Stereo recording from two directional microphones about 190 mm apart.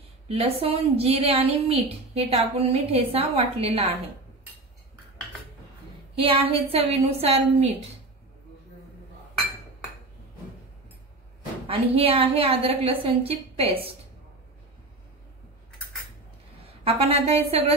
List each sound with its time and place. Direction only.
0.3 s a woman's voice: 30° right (ahead or behind)
6.1 s a woman's voice: 30° right (ahead or behind)
11.6 s a woman's voice: 30° right (ahead or behind)
16.8 s a woman's voice: 30° right (ahead or behind)